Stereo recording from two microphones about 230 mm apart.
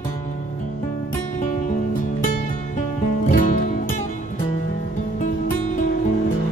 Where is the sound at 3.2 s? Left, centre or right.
Left.